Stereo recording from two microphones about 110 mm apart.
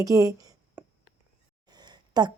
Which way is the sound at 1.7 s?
40° right (ahead or behind).